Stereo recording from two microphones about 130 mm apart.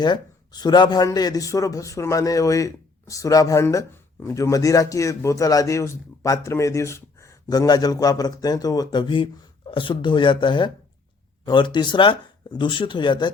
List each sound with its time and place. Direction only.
0.0 s a man's voice: 30° left (ahead or behind)